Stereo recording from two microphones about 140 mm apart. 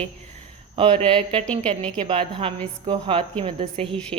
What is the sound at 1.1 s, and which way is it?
A woman's voice, 40° right (ahead or behind).